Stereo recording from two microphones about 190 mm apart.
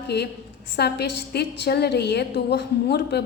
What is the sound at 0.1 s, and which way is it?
A woman's voice, 60° left (ahead or behind).